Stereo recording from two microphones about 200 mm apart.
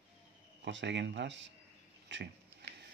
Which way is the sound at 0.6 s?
60° right (ahead or behind).